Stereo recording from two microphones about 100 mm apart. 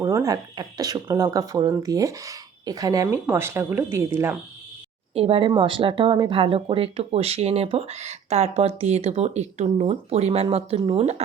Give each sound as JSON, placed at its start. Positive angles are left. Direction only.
{"t": 0.0, "sound": "speech", "side_deg": -35}
{"t": 5.1, "sound": "speech", "side_deg": -70}
{"t": 5.5, "sound": "speech", "side_deg": -55}
{"t": 10.8, "sound": "speech", "side_deg": -90}